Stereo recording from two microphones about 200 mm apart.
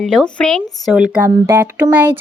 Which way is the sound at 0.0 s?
Centre (ahead or behind).